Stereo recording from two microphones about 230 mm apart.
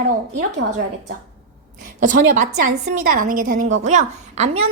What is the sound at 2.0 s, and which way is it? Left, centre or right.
A woman's voice, right.